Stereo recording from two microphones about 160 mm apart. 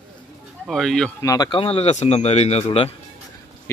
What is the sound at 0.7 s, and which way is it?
Speech, centre (ahead or behind).